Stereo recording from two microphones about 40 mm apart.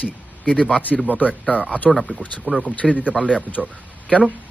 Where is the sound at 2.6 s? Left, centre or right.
Left.